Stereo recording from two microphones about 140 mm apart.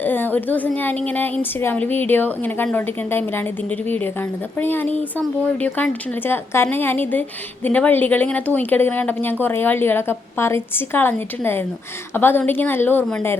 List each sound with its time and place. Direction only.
0.0 s a woman's voice: 15° left (ahead or behind)